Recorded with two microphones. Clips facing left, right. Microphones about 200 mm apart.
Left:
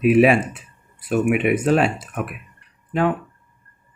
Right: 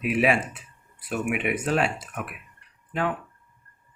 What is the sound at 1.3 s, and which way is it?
Speech, 25° left (ahead or behind).